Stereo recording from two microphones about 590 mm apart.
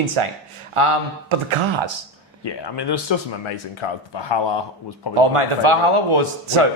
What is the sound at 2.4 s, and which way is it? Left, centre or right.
Speech, left.